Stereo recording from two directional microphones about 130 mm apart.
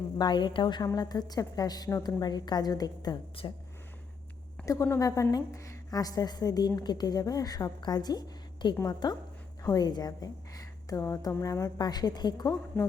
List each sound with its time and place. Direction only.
0.2 s a woman's voice: 35° left (ahead or behind)
3.4 s speech: 45° left (ahead or behind)
4.6 s a woman's voice: 25° left (ahead or behind)